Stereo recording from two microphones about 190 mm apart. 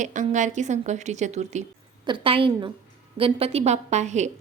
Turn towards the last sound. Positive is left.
turn(degrees=-40)  # may be behind; listen again after turning